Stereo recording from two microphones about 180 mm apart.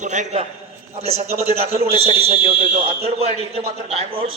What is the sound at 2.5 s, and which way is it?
A man's voice, 35° right (ahead or behind).